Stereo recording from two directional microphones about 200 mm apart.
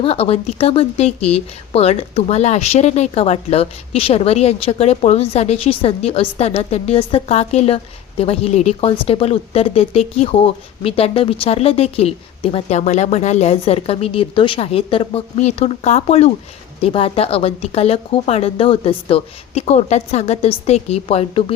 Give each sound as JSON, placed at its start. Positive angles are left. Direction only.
{"t": 0.0, "sound": "speech", "side_deg": 30}